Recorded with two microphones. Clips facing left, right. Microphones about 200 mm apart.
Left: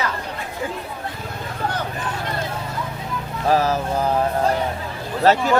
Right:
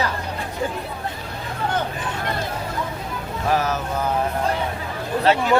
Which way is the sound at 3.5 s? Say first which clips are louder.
Left 4 dB; 30° left (ahead or behind).